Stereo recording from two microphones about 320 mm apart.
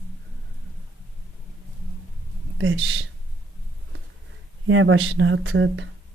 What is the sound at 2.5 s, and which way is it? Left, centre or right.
Speech, right.